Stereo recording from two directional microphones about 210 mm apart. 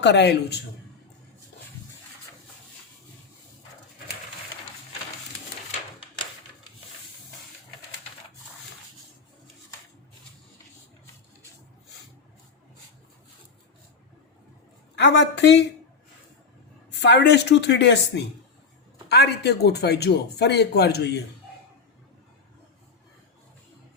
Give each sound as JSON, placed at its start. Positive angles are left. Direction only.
{"t": 0.0, "sound": "a man's voice", "side_deg": 55}
{"t": 14.9, "sound": "a woman's voice", "side_deg": 55}
{"t": 16.9, "sound": "a woman's voice", "side_deg": 55}